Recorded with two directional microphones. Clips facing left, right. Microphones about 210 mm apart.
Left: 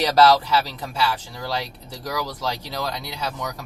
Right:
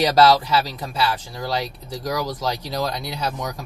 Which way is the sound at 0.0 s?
15° right (ahead or behind).